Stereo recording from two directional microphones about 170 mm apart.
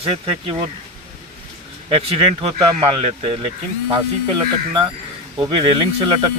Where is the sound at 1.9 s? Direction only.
35° right (ahead or behind).